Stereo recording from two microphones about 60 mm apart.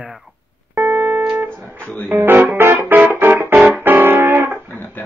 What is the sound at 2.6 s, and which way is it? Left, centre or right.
Music, right.